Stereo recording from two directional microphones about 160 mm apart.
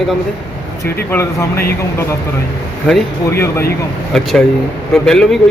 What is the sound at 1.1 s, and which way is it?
Speech, 15° left (ahead or behind).